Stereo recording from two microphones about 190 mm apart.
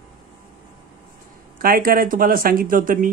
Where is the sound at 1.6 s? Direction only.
50° right (ahead or behind).